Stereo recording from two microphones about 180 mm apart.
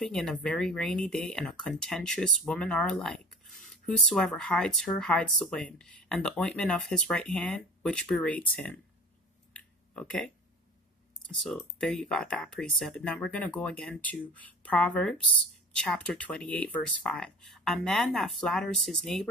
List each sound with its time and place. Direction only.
0.0 s speech: 5° left (ahead or behind)
9.5 s a sound: 5° left (ahead or behind)
11.2 s speech: centre (ahead or behind)